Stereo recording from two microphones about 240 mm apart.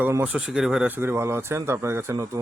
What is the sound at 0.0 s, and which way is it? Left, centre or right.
Speech, centre.